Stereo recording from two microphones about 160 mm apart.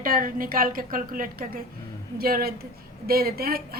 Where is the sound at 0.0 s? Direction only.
60° right (ahead or behind).